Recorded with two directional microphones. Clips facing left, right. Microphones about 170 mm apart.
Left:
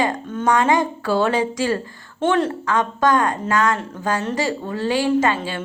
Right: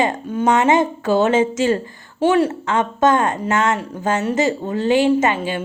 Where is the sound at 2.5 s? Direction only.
25° right (ahead or behind).